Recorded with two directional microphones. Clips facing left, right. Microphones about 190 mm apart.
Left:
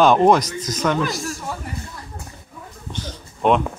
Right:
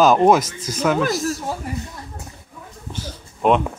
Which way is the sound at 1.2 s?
40° right (ahead or behind).